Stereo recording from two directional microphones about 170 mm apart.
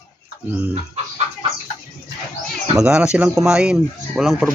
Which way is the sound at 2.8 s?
5° right (ahead or behind).